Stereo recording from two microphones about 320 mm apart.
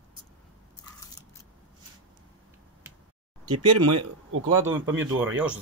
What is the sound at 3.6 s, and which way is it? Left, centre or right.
Speech, right.